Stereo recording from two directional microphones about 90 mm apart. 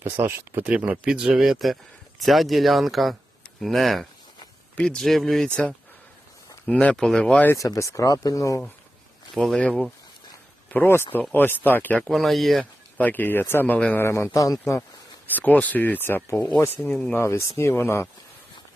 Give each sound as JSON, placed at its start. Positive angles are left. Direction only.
{"t": 0.0, "sound": "speech", "side_deg": -25}
{"t": 0.9, "sound": "speech", "side_deg": -10}
{"t": 6.7, "sound": "speech", "side_deg": 10}
{"t": 7.6, "sound": "speech", "side_deg": 35}
{"t": 9.3, "sound": "speech", "side_deg": 0}
{"t": 9.6, "sound": "speech", "side_deg": 15}
{"t": 10.7, "sound": "speech", "side_deg": 25}
{"t": 12.1, "sound": "speech", "side_deg": 0}
{"t": 13.0, "sound": "speech", "side_deg": 20}
{"t": 13.7, "sound": "speech", "side_deg": 15}
{"t": 14.0, "sound": "speech", "side_deg": 30}
{"t": 15.3, "sound": "speech", "side_deg": 20}
{"t": 16.9, "sound": "speech", "side_deg": 15}
{"t": 17.2, "sound": "speech", "side_deg": 30}